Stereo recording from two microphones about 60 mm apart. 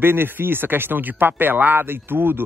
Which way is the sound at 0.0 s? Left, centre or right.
Right.